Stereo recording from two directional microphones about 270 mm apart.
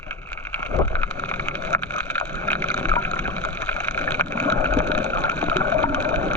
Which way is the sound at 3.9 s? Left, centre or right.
Centre.